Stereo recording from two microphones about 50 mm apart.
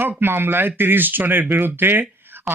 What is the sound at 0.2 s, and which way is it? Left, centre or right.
Speech, right.